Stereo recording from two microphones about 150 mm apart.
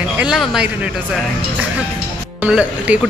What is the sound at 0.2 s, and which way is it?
Speech, centre (ahead or behind).